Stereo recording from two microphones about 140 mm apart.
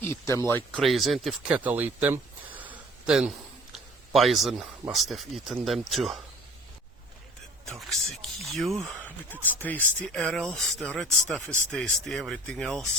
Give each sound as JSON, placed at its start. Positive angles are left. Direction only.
{"t": 0.1, "sound": "speech", "side_deg": 20}
{"t": 0.7, "sound": "speech", "side_deg": 0}
{"t": 1.5, "sound": "speech", "side_deg": -10}
{"t": 7.6, "sound": "speech", "side_deg": 5}